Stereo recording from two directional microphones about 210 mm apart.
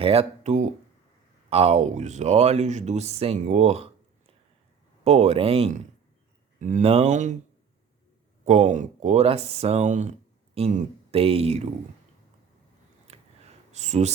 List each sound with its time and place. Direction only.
0.0 s speech: 30° right (ahead or behind)
5.0 s speech: 30° right (ahead or behind)
8.4 s speech: 35° right (ahead or behind)
13.1 s a sound: 30° right (ahead or behind)